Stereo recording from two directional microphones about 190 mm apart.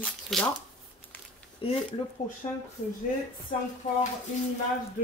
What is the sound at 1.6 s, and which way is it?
Speech, 25° left (ahead or behind).